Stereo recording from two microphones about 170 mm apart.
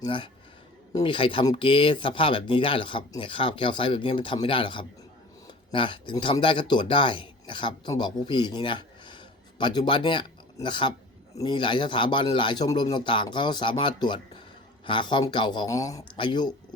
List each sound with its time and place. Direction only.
0.0 s speech: 30° left (ahead or behind)